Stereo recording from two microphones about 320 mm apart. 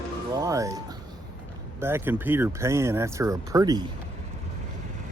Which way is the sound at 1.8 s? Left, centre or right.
Centre.